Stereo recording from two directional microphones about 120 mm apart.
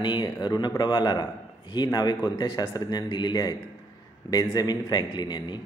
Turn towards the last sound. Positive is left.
turn(degrees=35)  # may be behind; listen again after turning